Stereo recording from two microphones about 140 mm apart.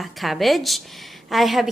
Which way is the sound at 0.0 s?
Centre (ahead or behind).